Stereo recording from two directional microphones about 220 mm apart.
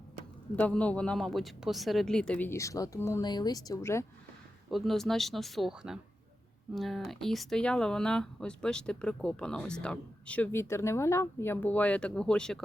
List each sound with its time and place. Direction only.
0.5 s speech: 5° left (ahead or behind)
4.7 s speech: centre (ahead or behind)